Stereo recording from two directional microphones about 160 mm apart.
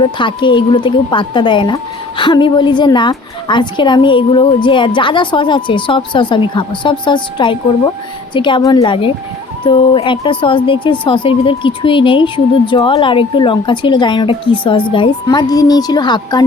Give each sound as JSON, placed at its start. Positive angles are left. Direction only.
{"t": 0.0, "sound": "a woman's voice", "side_deg": 30}